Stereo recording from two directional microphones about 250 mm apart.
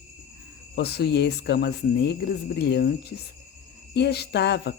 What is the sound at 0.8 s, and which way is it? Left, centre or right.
Speech, left.